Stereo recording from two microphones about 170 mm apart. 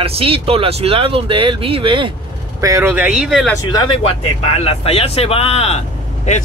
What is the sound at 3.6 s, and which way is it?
Speech, 25° left (ahead or behind).